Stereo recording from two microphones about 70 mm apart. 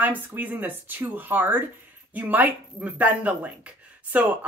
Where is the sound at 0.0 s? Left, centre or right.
Right.